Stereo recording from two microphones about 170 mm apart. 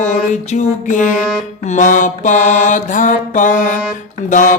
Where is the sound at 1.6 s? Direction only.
50° left (ahead or behind).